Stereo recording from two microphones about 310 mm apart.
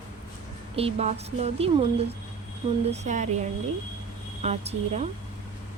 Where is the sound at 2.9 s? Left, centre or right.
Right.